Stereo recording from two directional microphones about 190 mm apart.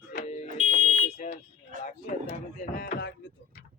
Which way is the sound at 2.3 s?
45° left (ahead or behind).